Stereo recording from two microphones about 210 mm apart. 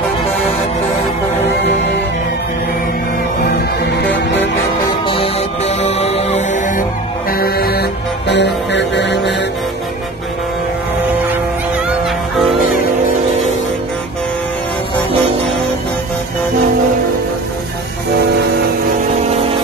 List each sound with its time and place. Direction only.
3.4 s music: 50° left (ahead or behind)
5.0 s music: 25° left (ahead or behind)
7.2 s music: 45° left (ahead or behind)